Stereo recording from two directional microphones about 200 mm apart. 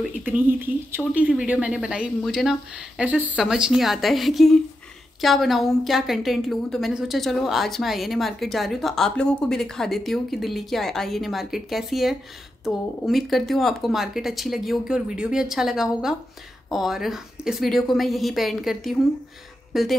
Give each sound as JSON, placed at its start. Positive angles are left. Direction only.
{"t": 0.0, "sound": "a woman's voice", "side_deg": -10}